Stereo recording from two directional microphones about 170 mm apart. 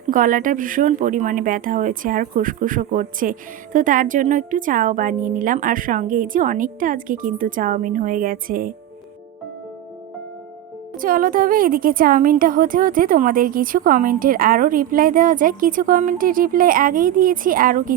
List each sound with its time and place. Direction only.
0.1 s speech: 50° right (ahead or behind)
10.9 s a woman's voice: 55° right (ahead or behind)